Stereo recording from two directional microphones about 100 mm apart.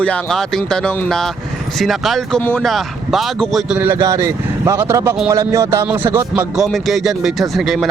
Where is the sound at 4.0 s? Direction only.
35° right (ahead or behind).